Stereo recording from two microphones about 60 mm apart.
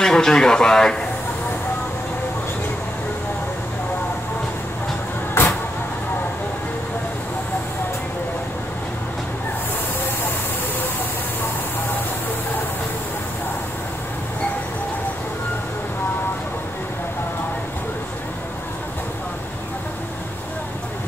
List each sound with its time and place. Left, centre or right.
0.0 s speech: centre
5.4 s vehicle: left